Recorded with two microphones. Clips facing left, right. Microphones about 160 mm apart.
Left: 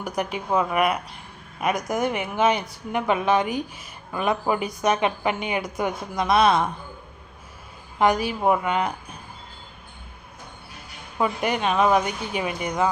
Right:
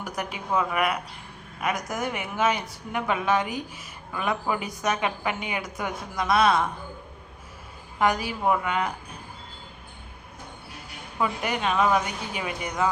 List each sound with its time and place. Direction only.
0.2 s a woman's voice: 25° left (ahead or behind)
7.9 s a woman's voice: 20° left (ahead or behind)
11.2 s a woman's voice: 20° left (ahead or behind)